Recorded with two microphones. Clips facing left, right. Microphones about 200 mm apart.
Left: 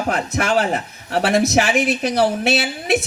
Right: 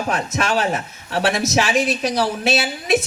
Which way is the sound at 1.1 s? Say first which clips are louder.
Left 3 dB; 60° left (ahead or behind).